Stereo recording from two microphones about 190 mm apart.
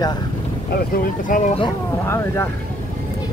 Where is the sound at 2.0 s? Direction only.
15° left (ahead or behind).